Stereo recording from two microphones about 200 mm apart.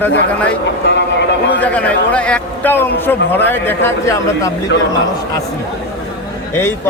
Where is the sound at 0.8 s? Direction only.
65° left (ahead or behind).